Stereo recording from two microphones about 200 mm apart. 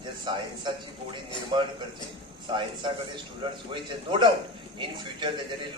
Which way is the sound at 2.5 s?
25° right (ahead or behind).